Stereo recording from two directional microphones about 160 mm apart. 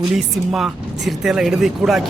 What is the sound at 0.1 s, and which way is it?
Speech, centre (ahead or behind).